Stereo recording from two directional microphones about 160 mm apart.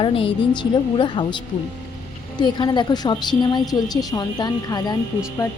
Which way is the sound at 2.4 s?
30° left (ahead or behind).